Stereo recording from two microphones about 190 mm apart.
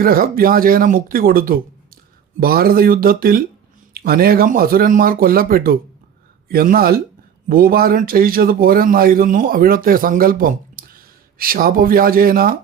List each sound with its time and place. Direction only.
0.0 s speech: 50° right (ahead or behind)